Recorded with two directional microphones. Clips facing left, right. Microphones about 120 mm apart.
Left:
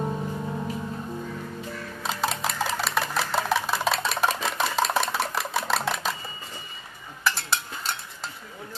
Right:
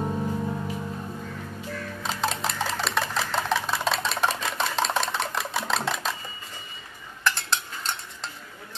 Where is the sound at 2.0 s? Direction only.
Centre (ahead or behind).